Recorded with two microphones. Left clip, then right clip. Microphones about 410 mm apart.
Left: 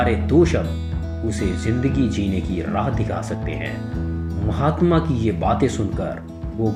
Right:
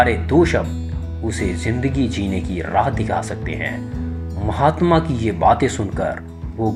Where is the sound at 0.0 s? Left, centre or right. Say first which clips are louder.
Right 3 dB; centre.